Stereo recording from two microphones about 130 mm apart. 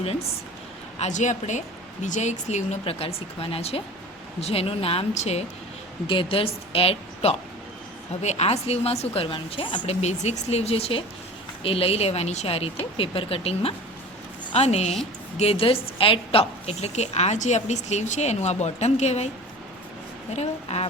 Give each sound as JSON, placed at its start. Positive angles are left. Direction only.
{"t": 0.9, "sound": "a woman's voice", "side_deg": 65}
{"t": 6.1, "sound": "a woman's voice", "side_deg": 45}
{"t": 20.3, "sound": "a woman's voice", "side_deg": 55}